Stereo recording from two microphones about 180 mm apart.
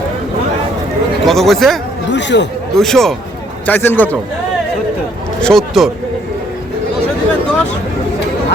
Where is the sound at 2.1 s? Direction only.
75° left (ahead or behind).